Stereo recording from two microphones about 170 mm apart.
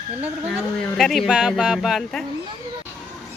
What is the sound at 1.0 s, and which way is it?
Speech, centre (ahead or behind).